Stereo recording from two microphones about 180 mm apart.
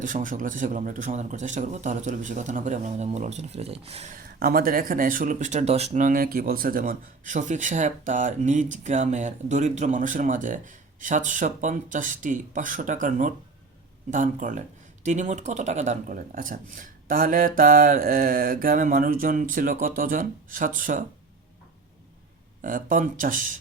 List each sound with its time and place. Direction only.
0.0 s a man's voice: 45° right (ahead or behind)
4.1 s speech: 55° right (ahead or behind)
22.6 s speech: 50° right (ahead or behind)